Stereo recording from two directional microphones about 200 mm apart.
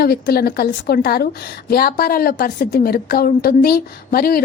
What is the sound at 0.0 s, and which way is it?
A woman's voice, 50° left (ahead or behind).